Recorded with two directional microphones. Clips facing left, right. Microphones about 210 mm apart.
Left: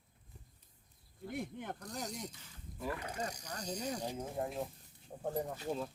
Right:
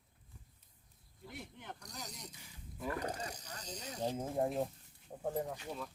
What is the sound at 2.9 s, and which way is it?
Speech, 40° right (ahead or behind).